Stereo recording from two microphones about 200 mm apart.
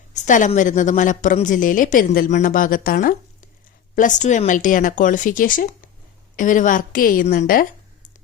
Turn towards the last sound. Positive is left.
turn(degrees=45)  # may be behind; listen again after turning